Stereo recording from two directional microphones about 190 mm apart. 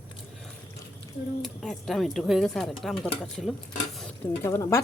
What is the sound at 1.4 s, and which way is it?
Speech, centre (ahead or behind).